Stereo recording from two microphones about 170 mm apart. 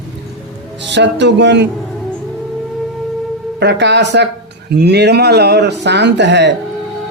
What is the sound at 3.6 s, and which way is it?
Speech, 90° right.